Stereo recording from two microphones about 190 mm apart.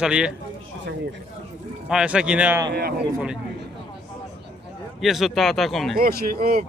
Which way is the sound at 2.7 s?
55° right (ahead or behind).